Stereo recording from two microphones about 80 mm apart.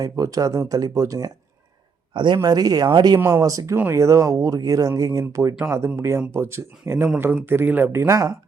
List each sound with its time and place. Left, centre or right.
0.0 s speech: right
2.1 s a man's voice: right
3.4 s speech: right
8.0 s speech: right